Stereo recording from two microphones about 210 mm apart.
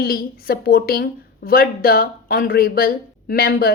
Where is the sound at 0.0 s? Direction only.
45° left (ahead or behind).